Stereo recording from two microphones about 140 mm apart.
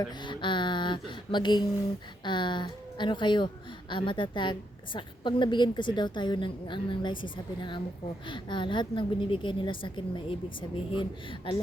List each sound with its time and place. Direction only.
0.1 s a woman's voice: 35° left (ahead or behind)